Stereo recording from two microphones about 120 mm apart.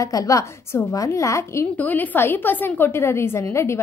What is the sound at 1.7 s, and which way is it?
Speech, 15° left (ahead or behind).